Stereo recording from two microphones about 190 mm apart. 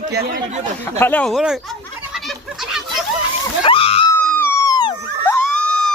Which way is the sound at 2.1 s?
Centre (ahead or behind).